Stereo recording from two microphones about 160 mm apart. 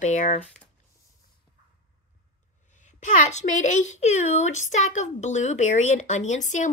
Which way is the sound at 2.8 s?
50° left (ahead or behind).